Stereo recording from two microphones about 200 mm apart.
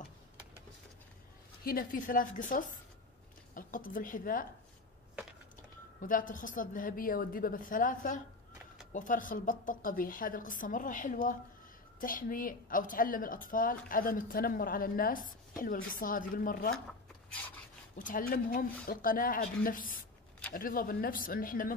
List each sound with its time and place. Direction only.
1.6 s a woman's voice: 45° left (ahead or behind)
5.9 s a woman's voice: 40° left (ahead or behind)
17.9 s a woman's voice: 45° left (ahead or behind)